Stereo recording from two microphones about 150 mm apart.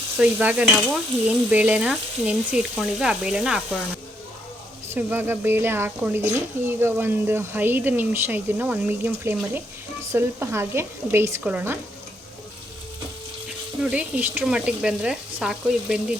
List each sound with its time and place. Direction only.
0.2 s speech: 5° right (ahead or behind)
4.9 s speech: 15° right (ahead or behind)
13.8 s speech: 10° right (ahead or behind)